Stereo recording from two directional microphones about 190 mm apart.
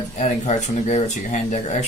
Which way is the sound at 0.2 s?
35° left (ahead or behind).